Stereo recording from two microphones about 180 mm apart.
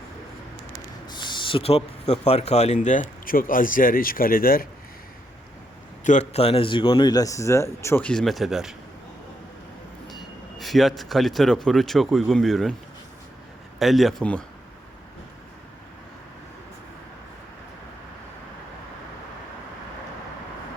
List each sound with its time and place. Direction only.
1.1 s speech: 25° left (ahead or behind); by 4.7 s 55° left (ahead or behind)
6.1 s speech: 35° left (ahead or behind); by 8.7 s centre (ahead or behind)
10.1 s speech: centre (ahead or behind)
13.7 s speech: centre (ahead or behind)